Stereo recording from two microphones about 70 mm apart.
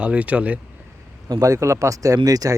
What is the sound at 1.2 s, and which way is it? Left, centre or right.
Speech, right.